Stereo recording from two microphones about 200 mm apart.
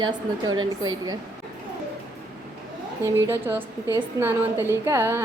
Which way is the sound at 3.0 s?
10° right (ahead or behind).